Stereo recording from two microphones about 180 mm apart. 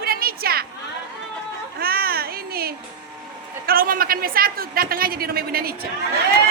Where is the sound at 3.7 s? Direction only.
55° right (ahead or behind).